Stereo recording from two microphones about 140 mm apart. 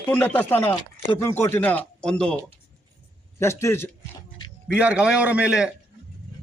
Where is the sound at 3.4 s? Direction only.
20° left (ahead or behind).